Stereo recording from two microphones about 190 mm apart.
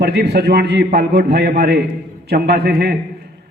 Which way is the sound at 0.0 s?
60° right (ahead or behind).